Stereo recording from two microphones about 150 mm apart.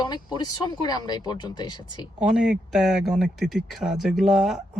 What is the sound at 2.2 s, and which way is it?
Speech, 5° right (ahead or behind).